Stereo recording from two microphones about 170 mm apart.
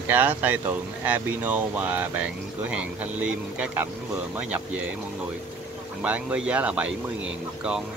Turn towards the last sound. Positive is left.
turn(degrees=-5)  # may be behind; listen again after turning